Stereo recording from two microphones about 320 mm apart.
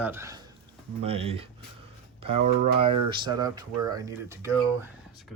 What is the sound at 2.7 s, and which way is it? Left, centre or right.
Speech, centre.